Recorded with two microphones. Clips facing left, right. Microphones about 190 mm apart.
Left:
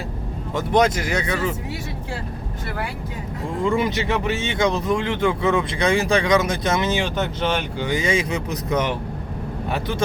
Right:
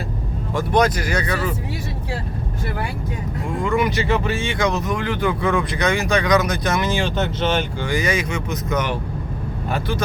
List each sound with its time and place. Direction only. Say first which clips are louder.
0.5 s speech: even; 25° left (ahead or behind)
3.6 s speech: even; 30° left (ahead or behind)